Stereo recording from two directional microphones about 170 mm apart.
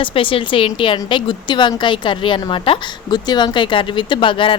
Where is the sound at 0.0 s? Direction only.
30° left (ahead or behind).